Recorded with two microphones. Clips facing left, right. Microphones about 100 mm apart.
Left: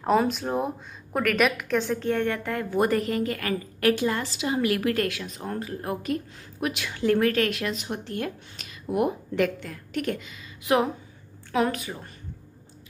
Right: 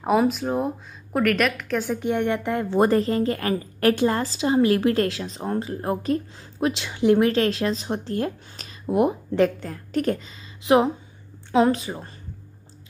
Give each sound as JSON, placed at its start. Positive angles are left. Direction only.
{"t": 0.0, "sound": "a woman's voice", "side_deg": -5}
{"t": 2.0, "sound": "a woman's voice", "side_deg": -20}